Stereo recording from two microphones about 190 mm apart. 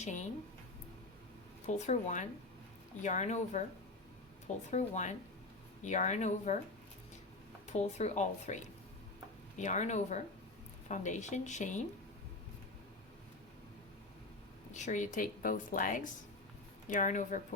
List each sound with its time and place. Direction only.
1.6 s speech: 35° left (ahead or behind)
7.7 s speech: 35° left (ahead or behind)
14.7 s speech: 40° left (ahead or behind)